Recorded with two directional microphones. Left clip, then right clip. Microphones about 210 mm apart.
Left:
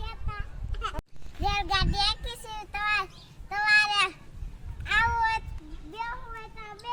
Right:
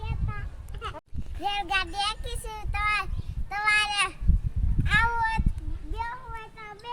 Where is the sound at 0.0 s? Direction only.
50° left (ahead or behind).